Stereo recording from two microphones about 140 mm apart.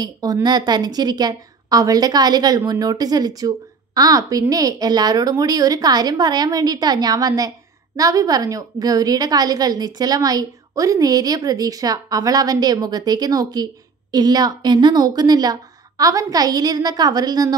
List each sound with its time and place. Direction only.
0.0 s a woman's voice: 30° right (ahead or behind)